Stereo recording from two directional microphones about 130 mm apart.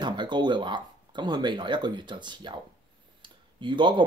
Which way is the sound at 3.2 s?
35° right (ahead or behind).